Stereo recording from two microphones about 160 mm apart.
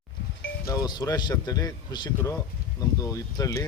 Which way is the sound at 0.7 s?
25° left (ahead or behind).